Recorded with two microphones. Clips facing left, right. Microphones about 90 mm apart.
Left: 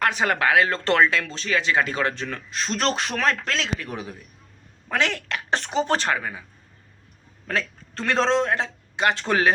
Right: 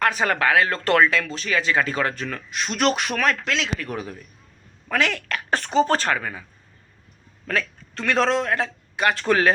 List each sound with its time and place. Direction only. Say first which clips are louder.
0.1 s speech: even; 25° left (ahead or behind)
3.8 s speech: right 3 dB; 20° left (ahead or behind)
7.4 s a man's voice: right 1 dB; 30° left (ahead or behind)